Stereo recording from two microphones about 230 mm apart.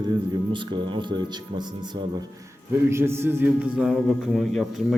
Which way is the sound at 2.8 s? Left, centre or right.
Centre.